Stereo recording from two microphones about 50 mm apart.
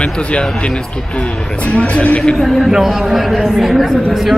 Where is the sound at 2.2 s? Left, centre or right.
Centre.